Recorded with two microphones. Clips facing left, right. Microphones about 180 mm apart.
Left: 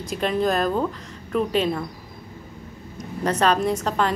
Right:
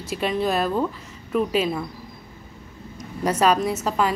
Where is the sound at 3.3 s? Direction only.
10° right (ahead or behind).